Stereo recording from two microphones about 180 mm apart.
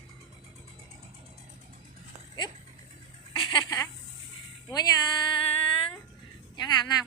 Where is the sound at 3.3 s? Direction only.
25° left (ahead or behind).